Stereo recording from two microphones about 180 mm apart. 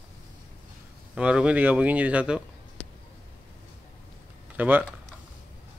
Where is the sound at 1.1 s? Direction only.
5° right (ahead or behind).